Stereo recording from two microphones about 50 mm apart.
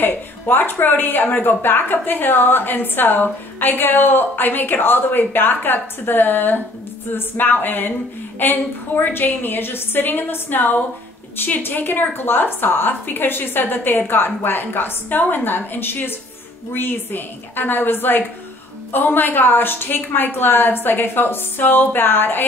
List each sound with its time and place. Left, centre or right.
0.0 s speech: left
7.2 s music: left
8.4 s speech: left